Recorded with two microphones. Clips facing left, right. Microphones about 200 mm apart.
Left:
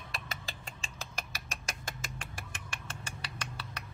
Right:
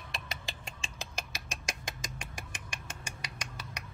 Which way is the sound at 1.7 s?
15° right (ahead or behind).